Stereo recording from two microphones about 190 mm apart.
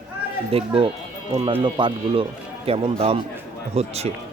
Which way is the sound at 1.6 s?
25° right (ahead or behind).